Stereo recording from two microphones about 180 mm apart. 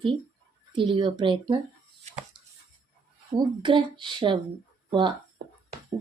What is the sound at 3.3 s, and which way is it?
A woman's voice, 25° right (ahead or behind).